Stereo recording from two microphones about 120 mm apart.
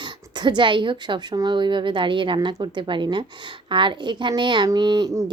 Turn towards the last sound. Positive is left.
turn(degrees=-30)  # may be behind; listen again after turning